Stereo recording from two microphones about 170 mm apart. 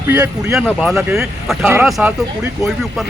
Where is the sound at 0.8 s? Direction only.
Centre (ahead or behind).